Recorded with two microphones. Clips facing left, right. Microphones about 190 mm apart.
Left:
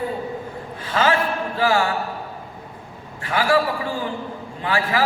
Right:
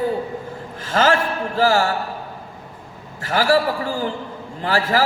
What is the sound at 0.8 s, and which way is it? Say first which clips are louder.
A man's voice: right 2 dB; 45° right (ahead or behind).